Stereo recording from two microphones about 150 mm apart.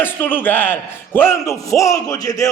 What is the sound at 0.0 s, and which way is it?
A man's voice, 15° left (ahead or behind).